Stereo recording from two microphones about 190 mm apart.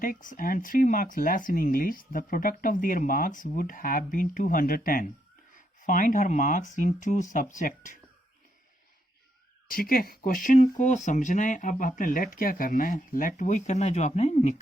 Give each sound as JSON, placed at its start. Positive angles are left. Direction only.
{"t": 0.0, "sound": "speech", "side_deg": 45}
{"t": 9.6, "sound": "speech", "side_deg": 50}